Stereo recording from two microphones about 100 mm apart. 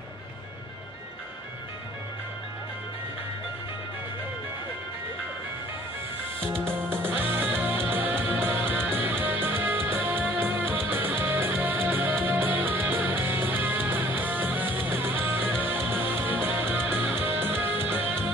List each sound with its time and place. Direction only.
7.0 s music: 20° right (ahead or behind)